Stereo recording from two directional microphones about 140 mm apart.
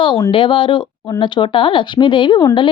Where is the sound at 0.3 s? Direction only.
35° left (ahead or behind).